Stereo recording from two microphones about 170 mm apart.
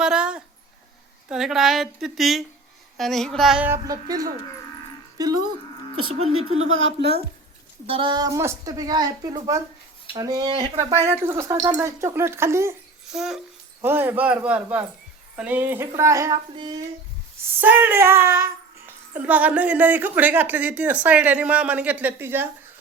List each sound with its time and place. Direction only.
0.0 s a sound: 5° right (ahead or behind)
1.3 s a woman's voice: 5° right (ahead or behind)
3.8 s a woman's voice: 20° right (ahead or behind)
6.1 s speech: 35° right (ahead or behind)
7.9 s a woman's voice: 30° right (ahead or behind); by 12.7 s 15° right (ahead or behind)
13.1 s a woman's voice: centre (ahead or behind); by 16.8 s 25° right (ahead or behind)
17.6 s a woman's voice: 10° right (ahead or behind)